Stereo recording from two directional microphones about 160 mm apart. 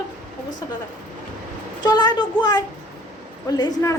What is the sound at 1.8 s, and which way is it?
A child's voice, 25° left (ahead or behind).